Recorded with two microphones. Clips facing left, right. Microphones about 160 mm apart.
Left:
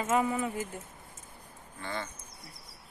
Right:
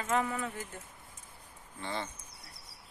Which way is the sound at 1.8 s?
25° right (ahead or behind).